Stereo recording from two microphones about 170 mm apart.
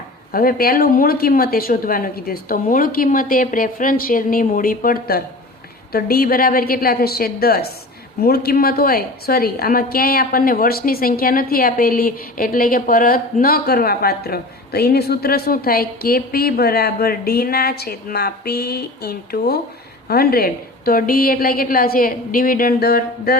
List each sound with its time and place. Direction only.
0.3 s a woman's voice: 60° left (ahead or behind)